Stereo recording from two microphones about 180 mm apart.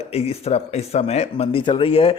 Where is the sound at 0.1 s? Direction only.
35° left (ahead or behind).